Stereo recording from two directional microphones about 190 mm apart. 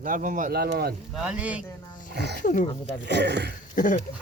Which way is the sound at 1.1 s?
5° right (ahead or behind).